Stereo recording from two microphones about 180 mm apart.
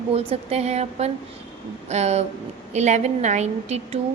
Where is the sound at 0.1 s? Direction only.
35° right (ahead or behind).